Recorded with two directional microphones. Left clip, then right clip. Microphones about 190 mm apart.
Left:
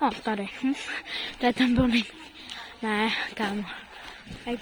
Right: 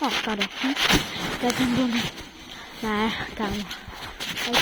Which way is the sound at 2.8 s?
10° left (ahead or behind).